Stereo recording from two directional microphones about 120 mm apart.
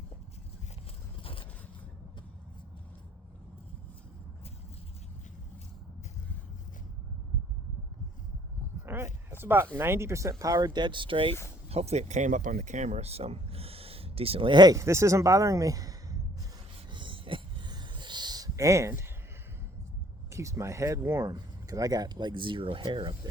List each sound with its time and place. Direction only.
1.2 s vehicle: 50° left (ahead or behind)
8.9 s a sound: 20° right (ahead or behind)
9.4 s speech: 20° right (ahead or behind); by 11.3 s 45° right (ahead or behind)
11.7 s speech: 60° right (ahead or behind); by 16.1 s 30° right (ahead or behind)
16.9 s a sound: 45° right (ahead or behind); by 19.1 s 20° right (ahead or behind)
20.3 s speech: 25° right (ahead or behind); by 23.3 s 40° right (ahead or behind)